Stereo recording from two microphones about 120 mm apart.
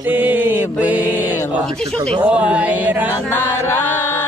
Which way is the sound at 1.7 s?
5° left (ahead or behind).